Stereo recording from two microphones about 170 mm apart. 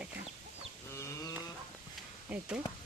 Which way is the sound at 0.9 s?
15° left (ahead or behind).